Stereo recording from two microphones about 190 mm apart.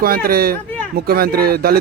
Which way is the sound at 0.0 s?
50° right (ahead or behind).